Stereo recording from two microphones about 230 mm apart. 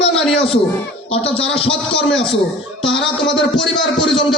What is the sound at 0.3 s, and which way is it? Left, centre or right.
Speech, left.